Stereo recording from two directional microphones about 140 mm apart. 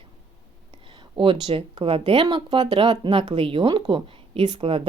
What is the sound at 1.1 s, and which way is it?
Speech, 40° right (ahead or behind).